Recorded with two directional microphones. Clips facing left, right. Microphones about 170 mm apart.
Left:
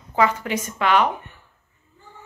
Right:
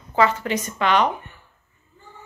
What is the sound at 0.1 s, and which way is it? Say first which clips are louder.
A woman's voice: right 1 dB; 10° left (ahead or behind).